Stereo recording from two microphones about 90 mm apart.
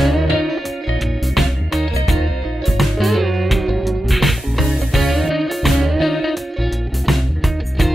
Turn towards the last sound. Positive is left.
turn(degrees=0)  # may be behind; listen again after turning